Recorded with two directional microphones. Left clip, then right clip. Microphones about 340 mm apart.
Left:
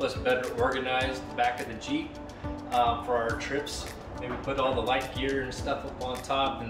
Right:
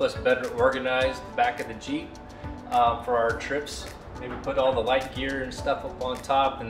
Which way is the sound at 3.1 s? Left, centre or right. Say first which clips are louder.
Right 4 dB; centre.